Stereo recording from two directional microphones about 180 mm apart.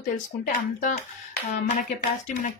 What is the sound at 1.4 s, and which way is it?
Speech, 45° left (ahead or behind).